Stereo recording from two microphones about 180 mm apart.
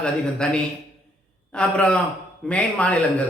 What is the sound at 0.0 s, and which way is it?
A man's voice, 5° left (ahead or behind).